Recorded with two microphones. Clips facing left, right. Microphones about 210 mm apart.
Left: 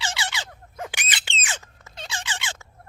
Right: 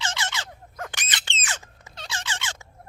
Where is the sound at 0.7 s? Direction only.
10° left (ahead or behind).